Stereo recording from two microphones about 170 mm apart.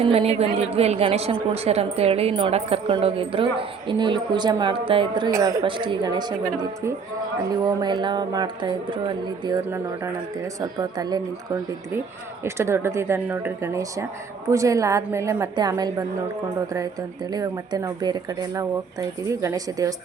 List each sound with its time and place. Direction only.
0.0 s a woman's voice: 35° right (ahead or behind)
7.3 s speech: 20° right (ahead or behind)
9.6 s a woman's voice: 15° right (ahead or behind)
17.3 s speech: 20° right (ahead or behind)